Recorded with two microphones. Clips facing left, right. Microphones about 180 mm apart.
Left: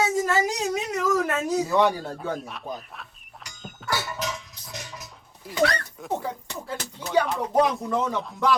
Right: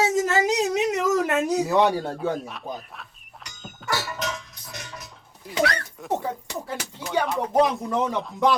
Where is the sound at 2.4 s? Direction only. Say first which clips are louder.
Right 1 dB; centre (ahead or behind).